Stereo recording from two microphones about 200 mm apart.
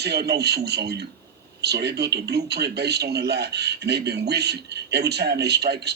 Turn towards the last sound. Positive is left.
turn(degrees=-55)  # may be behind; listen again after turning